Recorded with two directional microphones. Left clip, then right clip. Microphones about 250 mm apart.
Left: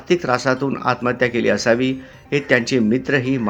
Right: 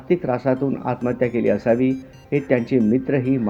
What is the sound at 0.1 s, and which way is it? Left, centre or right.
Speech, centre.